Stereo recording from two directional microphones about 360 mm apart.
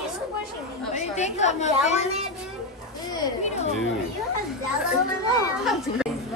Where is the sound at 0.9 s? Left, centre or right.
Centre.